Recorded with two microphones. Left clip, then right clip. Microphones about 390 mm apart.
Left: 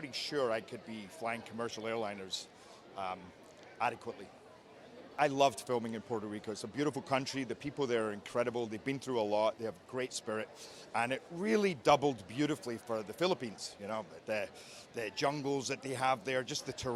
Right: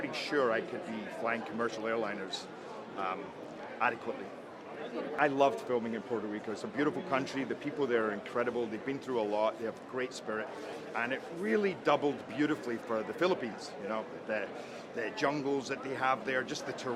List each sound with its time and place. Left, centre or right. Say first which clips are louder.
0.0 s speech: right 4 dB; left
3.8 s a man's voice: right 3 dB; left
5.1 s a man's voice: right 1 dB; left